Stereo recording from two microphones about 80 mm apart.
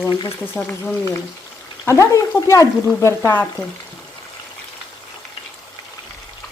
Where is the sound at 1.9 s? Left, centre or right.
Left.